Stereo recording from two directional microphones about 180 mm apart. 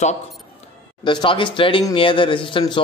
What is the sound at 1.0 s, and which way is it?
A man's voice, 25° left (ahead or behind).